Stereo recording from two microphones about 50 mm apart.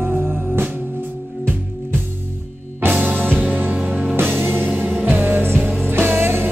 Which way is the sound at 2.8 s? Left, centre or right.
Right.